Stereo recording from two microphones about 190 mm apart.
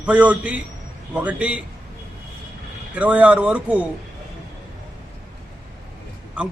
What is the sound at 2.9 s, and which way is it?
Speech, 5° right (ahead or behind).